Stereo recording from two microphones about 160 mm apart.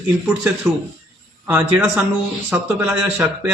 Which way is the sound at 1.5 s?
10° right (ahead or behind).